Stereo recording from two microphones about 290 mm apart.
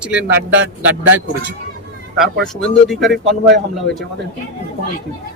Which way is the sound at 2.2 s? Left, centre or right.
Centre.